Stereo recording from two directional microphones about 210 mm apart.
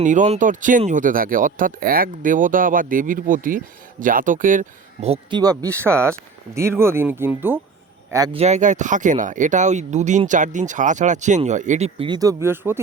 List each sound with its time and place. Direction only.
0.0 s speech: 35° right (ahead or behind)
5.4 s speech: 15° right (ahead or behind)
8.4 s speech: 35° right (ahead or behind); by 12.8 s 10° right (ahead or behind)